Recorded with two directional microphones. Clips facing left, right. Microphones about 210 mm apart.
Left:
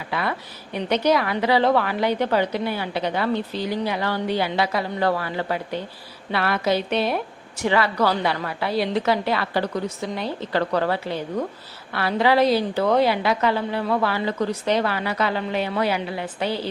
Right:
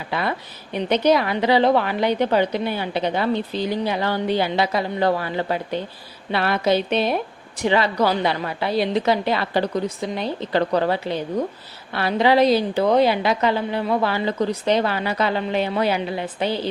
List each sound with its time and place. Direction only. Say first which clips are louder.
0.1 s a woman's voice: right 2 dB; 25° right (ahead or behind)